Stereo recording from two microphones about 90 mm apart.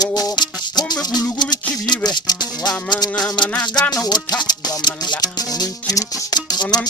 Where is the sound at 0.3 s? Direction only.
50° left (ahead or behind).